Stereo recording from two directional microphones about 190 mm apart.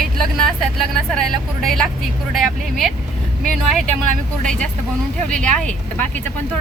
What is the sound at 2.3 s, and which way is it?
Speech, centre (ahead or behind).